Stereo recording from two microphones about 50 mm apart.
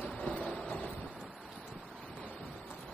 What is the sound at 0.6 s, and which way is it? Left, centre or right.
Wind noise, centre.